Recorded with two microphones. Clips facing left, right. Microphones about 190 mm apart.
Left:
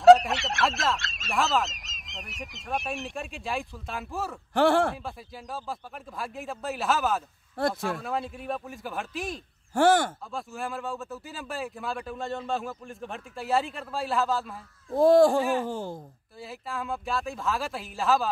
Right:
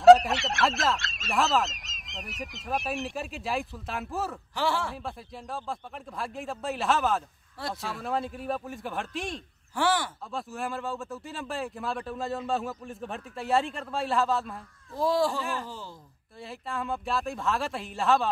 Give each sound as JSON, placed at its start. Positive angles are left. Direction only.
{"t": 0.0, "sound": "speech", "side_deg": 0}
{"t": 4.6, "sound": "speech", "side_deg": 55}
{"t": 4.9, "sound": "speech", "side_deg": 0}
{"t": 7.5, "sound": "speech", "side_deg": 50}
{"t": 8.0, "sound": "speech", "side_deg": 0}
{"t": 9.8, "sound": "speech", "side_deg": 50}
{"t": 10.3, "sound": "speech", "side_deg": 0}
{"t": 15.0, "sound": "speech", "side_deg": 50}
{"t": 16.3, "sound": "speech", "side_deg": 0}